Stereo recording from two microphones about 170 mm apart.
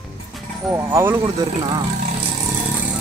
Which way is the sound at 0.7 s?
15° right (ahead or behind).